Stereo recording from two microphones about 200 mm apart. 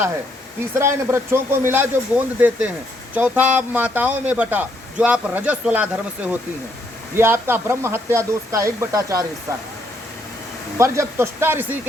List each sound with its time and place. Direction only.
0.8 s speech: 15° right (ahead or behind)
10.8 s speech: 15° right (ahead or behind)